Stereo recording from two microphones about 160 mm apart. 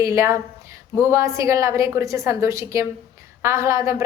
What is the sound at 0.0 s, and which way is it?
A woman's voice, 20° right (ahead or behind).